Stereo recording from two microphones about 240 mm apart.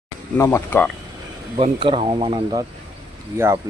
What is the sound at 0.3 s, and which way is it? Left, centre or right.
Speech, centre.